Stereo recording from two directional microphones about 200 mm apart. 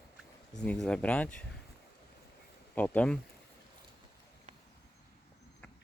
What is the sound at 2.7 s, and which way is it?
Speech, 10° left (ahead or behind).